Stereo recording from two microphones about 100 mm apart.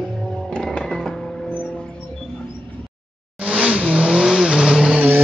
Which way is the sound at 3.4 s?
10° right (ahead or behind).